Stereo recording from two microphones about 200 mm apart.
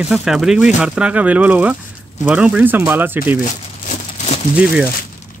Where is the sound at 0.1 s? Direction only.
5° right (ahead or behind).